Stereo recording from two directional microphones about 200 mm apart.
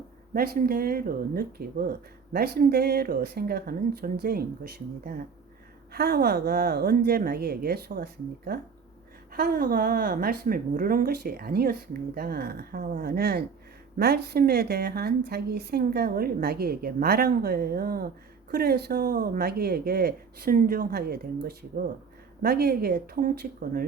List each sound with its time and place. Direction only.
0.3 s a woman's voice: 50° right (ahead or behind)
5.9 s a woman's voice: 50° right (ahead or behind)